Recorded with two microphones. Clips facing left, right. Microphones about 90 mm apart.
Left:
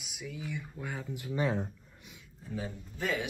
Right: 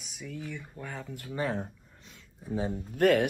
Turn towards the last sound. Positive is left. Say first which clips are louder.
# right 11 dB
turn(degrees=-60)  # may be behind; listen again after turning